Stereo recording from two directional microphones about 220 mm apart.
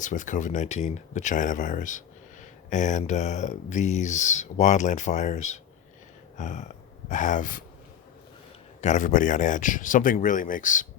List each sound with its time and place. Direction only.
0.0 s speech: 35° left (ahead or behind)
6.3 s a sound: 35° left (ahead or behind)
7.1 s speech: 35° left (ahead or behind)
8.8 s speech: 35° left (ahead or behind)